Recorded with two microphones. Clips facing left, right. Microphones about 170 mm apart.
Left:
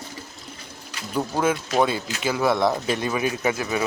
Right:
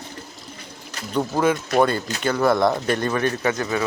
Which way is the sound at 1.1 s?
Centre (ahead or behind).